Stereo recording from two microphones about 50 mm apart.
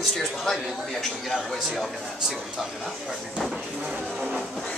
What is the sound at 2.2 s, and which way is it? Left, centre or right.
Speech, centre.